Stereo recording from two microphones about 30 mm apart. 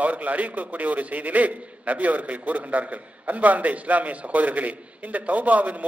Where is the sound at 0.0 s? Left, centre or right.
Right.